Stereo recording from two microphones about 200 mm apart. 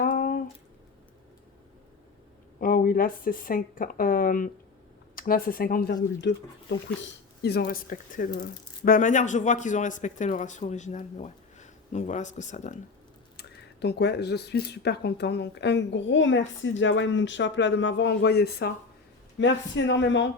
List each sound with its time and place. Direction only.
0.0 s a sound: 45° left (ahead or behind)
2.6 s speech: 45° left (ahead or behind)
13.3 s speech: 55° left (ahead or behind)
19.4 s speech: 65° left (ahead or behind)